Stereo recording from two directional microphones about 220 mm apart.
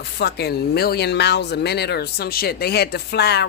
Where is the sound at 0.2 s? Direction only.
50° left (ahead or behind).